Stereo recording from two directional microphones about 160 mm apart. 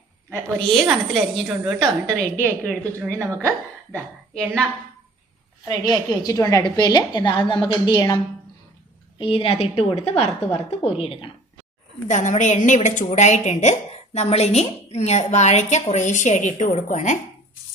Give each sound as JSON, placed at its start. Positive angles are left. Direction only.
{"t": 0.3, "sound": "a woman's voice", "side_deg": 5}
{"t": 3.0, "sound": "a woman's voice", "side_deg": -15}
{"t": 3.9, "sound": "a woman's voice", "side_deg": 5}
{"t": 5.6, "sound": "a woman's voice", "side_deg": 25}
{"t": 12.0, "sound": "a woman's voice", "side_deg": 50}